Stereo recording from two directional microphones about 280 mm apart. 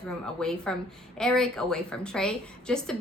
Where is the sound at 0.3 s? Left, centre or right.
Centre.